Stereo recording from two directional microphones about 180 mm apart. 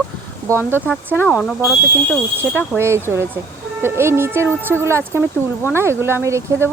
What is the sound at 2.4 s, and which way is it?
Speech, 10° right (ahead or behind).